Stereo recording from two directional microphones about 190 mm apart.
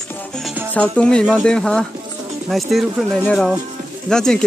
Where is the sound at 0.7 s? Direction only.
5° left (ahead or behind).